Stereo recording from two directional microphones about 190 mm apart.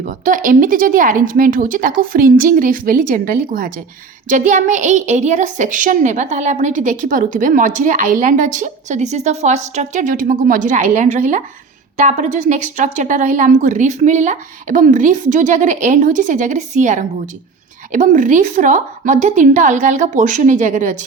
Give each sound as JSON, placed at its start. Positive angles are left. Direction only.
{"t": 0.0, "sound": "a woman's voice", "side_deg": -45}